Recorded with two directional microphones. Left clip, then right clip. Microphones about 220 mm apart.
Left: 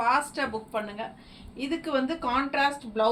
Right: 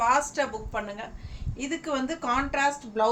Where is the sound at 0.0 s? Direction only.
15° right (ahead or behind).